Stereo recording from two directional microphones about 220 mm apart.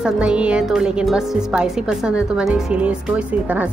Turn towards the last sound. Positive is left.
turn(degrees=-5)  # may be behind; listen again after turning